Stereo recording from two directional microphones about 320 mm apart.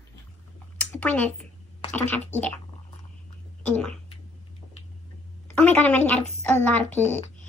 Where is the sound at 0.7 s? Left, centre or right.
Centre.